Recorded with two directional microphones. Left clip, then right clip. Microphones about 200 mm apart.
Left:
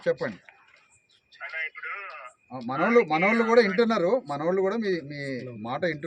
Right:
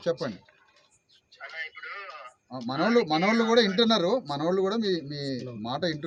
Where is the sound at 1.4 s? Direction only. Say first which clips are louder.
Left 4 dB; 10° right (ahead or behind).